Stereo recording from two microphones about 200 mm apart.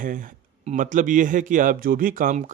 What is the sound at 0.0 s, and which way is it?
Speech, 45° right (ahead or behind).